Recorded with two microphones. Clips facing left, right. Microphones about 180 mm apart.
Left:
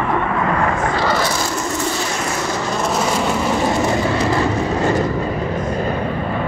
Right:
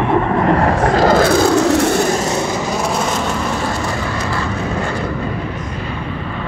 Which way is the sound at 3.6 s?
20° left (ahead or behind).